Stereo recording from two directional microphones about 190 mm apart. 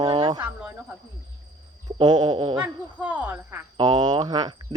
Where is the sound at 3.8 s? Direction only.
20° right (ahead or behind).